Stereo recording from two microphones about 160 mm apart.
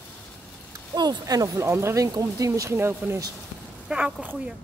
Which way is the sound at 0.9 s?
25° right (ahead or behind).